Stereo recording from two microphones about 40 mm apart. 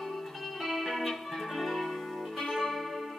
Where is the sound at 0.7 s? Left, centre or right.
Centre.